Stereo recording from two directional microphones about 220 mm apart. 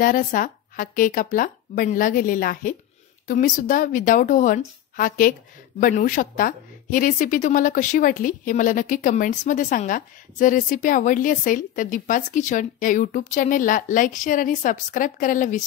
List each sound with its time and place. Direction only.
0.0 s a woman's voice: 40° left (ahead or behind)